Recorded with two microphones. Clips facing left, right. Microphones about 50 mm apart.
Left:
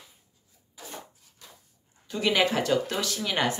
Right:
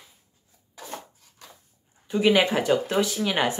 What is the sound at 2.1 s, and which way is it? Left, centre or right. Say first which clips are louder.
Speech: right 4 dB; centre.